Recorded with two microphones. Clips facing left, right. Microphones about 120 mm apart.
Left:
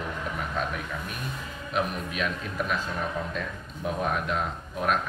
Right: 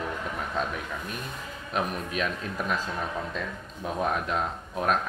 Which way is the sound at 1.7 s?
35° right (ahead or behind).